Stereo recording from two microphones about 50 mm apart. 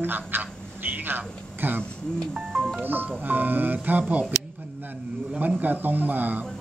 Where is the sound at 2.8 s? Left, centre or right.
Right.